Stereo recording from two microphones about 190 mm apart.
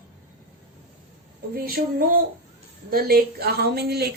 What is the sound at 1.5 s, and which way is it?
A woman's voice, 50° right (ahead or behind).